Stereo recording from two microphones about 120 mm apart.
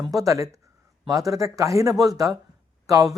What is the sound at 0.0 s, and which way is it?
Speech, 30° right (ahead or behind).